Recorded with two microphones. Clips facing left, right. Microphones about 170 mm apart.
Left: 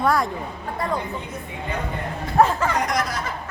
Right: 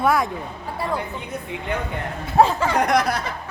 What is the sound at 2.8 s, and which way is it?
Speech, 60° right (ahead or behind).